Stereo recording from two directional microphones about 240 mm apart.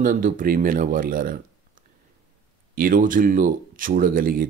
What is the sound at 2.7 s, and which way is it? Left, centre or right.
Speech, right.